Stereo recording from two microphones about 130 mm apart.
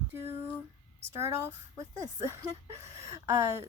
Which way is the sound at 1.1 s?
20° right (ahead or behind).